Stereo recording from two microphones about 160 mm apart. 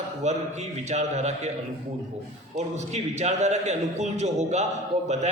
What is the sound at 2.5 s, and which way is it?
A man's voice, 45° right (ahead or behind).